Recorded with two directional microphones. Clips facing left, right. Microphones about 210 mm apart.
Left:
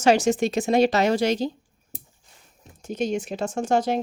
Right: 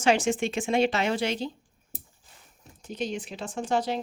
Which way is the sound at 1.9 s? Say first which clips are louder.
Left 2 dB; 5° right (ahead or behind).